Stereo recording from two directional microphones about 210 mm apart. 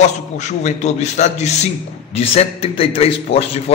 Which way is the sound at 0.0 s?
35° left (ahead or behind).